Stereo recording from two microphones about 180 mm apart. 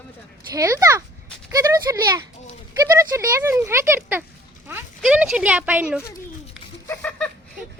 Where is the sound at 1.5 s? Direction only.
20° right (ahead or behind).